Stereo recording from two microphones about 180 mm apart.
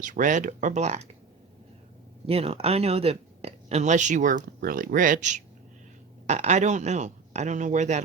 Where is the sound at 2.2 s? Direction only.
35° right (ahead or behind).